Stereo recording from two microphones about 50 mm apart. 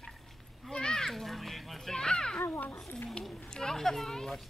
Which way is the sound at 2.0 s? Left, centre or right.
Centre.